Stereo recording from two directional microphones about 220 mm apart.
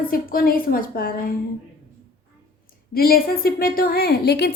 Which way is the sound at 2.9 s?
40° left (ahead or behind).